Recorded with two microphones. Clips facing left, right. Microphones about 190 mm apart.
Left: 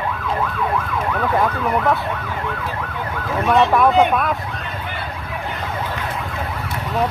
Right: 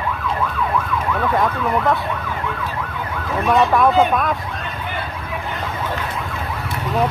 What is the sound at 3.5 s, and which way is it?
Speech, centre (ahead or behind).